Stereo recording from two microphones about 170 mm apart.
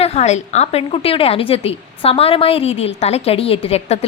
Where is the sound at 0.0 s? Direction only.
40° left (ahead or behind).